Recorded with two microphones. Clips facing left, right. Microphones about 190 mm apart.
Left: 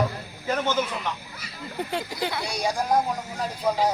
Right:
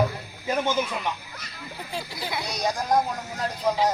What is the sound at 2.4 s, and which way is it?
Speech, 10° left (ahead or behind).